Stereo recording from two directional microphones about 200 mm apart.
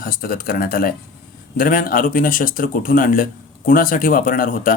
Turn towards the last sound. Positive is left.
turn(degrees=45)  # may be behind; listen again after turning